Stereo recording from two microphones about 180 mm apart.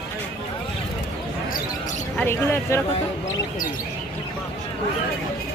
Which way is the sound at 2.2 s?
15° left (ahead or behind).